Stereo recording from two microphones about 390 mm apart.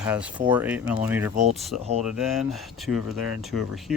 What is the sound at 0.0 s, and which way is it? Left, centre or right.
Speech, centre.